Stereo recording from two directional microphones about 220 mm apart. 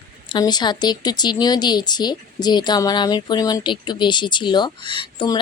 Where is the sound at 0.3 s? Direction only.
20° left (ahead or behind).